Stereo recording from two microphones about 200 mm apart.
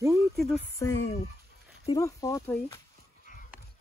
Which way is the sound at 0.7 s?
15° left (ahead or behind).